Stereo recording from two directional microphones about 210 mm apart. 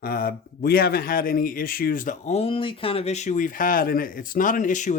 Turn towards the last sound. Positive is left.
turn(degrees=35)  # may be behind; listen again after turning